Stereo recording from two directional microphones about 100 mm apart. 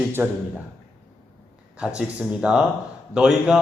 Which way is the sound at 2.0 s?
10° right (ahead or behind).